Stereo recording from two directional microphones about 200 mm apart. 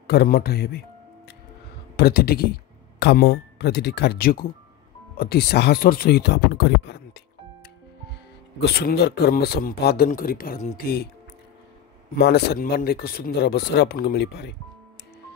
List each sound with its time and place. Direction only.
0.0 s a man's voice: 50° left (ahead or behind)
2.0 s a man's voice: 50° left (ahead or behind)
8.5 s a man's voice: 55° left (ahead or behind)
12.2 s a man's voice: 55° left (ahead or behind)